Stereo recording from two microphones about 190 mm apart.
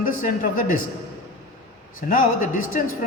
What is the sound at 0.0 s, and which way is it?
Speech, 50° left (ahead or behind).